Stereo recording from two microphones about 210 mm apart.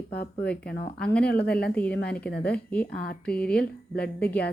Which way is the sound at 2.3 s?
50° left (ahead or behind).